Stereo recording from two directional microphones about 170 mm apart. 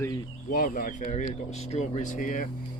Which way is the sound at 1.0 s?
40° left (ahead or behind).